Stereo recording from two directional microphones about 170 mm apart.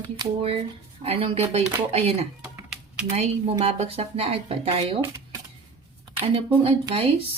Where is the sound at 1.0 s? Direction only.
35° right (ahead or behind).